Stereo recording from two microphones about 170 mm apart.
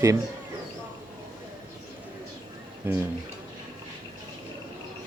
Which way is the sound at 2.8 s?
10° right (ahead or behind).